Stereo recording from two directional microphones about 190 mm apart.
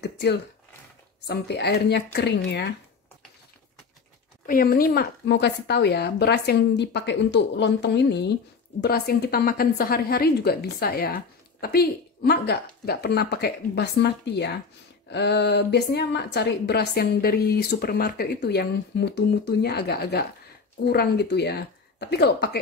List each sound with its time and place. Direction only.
0.0 s a sound: 60° left (ahead or behind)
1.2 s a woman's voice: 60° left (ahead or behind)
4.5 s a woman's voice: 50° left (ahead or behind)